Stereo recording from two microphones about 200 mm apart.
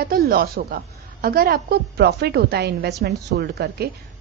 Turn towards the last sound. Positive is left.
turn(degrees=-50)  # may be behind; listen again after turning